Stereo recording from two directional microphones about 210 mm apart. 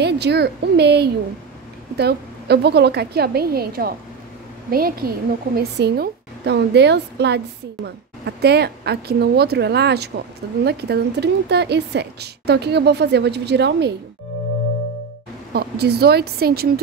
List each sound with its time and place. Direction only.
0.0 s a woman's voice: 50° right (ahead or behind)
15.5 s a woman's voice: 50° right (ahead or behind)